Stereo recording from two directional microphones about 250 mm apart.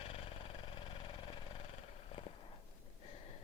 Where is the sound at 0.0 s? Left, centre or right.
Left.